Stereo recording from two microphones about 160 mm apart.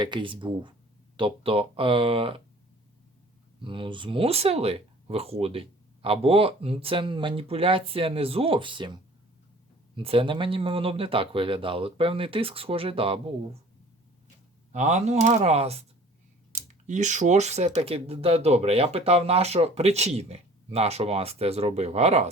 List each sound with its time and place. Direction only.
0.0 s speech: 30° right (ahead or behind)
3.6 s speech: 30° right (ahead or behind)
14.7 s speech: 45° right (ahead or behind)